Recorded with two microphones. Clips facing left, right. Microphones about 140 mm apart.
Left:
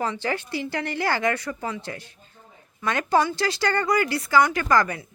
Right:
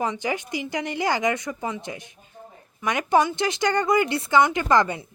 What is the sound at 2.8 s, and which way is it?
Speech, 15° right (ahead or behind).